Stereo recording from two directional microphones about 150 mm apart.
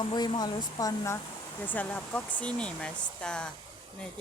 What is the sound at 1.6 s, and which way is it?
Speech, 10° left (ahead or behind).